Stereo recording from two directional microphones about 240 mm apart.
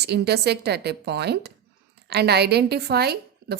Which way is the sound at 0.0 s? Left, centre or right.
Right.